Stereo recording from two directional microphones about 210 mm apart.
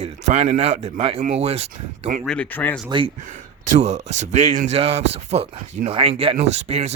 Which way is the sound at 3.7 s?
35° right (ahead or behind).